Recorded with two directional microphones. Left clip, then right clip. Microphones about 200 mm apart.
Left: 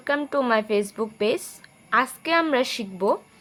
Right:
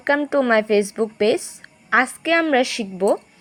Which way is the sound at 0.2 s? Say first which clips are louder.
Right 5 dB; 15° right (ahead or behind).